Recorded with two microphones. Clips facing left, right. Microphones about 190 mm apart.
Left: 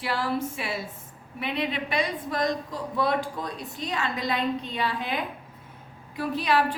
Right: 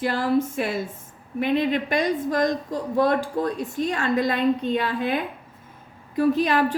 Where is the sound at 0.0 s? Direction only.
45° right (ahead or behind).